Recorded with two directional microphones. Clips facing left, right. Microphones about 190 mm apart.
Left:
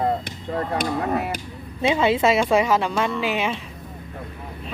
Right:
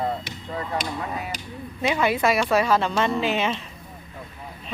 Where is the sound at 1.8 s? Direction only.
25° left (ahead or behind).